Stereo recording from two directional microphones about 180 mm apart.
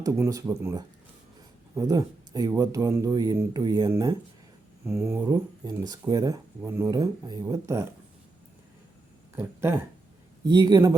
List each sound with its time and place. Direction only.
0.0 s speech: 20° right (ahead or behind)
9.3 s speech: 15° right (ahead or behind)